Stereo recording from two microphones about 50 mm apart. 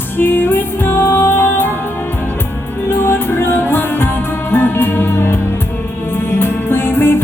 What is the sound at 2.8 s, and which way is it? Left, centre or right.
Music, left.